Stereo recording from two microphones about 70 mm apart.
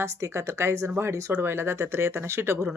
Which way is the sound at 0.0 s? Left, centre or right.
Right.